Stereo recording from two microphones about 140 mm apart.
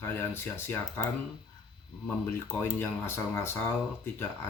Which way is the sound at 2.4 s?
15° left (ahead or behind).